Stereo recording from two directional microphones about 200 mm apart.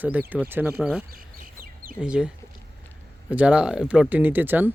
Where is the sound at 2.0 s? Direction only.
5° right (ahead or behind).